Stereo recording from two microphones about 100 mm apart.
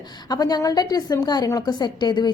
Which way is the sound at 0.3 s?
45° left (ahead or behind).